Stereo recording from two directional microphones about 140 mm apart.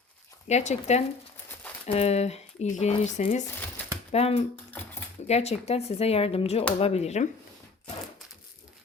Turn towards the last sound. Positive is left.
turn(degrees=50)  # may be behind; listen again after turning